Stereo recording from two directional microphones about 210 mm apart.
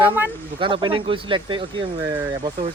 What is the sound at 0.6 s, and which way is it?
Speech, 25° right (ahead or behind).